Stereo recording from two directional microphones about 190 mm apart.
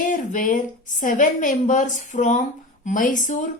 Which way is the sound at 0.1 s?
45° left (ahead or behind).